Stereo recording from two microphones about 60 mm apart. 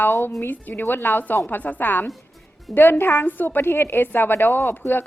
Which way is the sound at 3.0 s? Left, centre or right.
Left.